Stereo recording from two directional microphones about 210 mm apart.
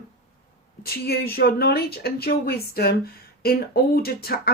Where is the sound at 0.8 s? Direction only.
50° left (ahead or behind).